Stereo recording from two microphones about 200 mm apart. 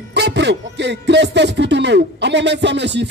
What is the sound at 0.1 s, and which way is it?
Speech, 60° right (ahead or behind).